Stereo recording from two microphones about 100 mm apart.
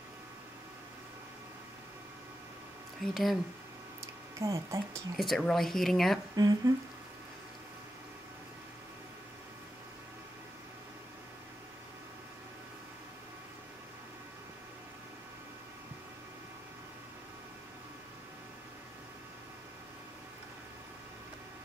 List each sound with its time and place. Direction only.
3.0 s speech: centre (ahead or behind)
4.0 s a sound: 30° right (ahead or behind)
5.1 s speech: centre (ahead or behind)
6.3 s speech: 40° right (ahead or behind)